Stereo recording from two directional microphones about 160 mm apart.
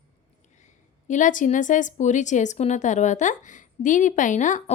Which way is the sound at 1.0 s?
50° left (ahead or behind).